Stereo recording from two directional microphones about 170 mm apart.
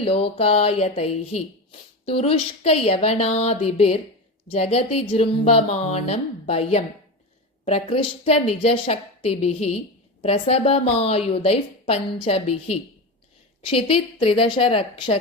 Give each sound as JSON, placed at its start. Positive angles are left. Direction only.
{"t": 0.0, "sound": "a woman's voice", "side_deg": 35}